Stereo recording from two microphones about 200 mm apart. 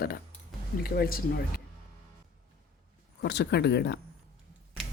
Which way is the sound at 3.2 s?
55° left (ahead or behind).